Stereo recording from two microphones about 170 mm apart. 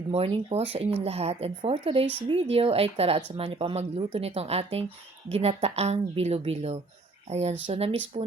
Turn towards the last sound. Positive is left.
turn(degrees=-35)  # may be behind; listen again after turning